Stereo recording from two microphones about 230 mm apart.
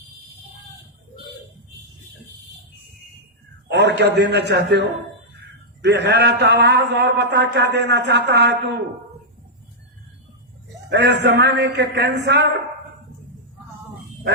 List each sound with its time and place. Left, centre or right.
3.7 s a man's voice: right
10.8 s a man's voice: right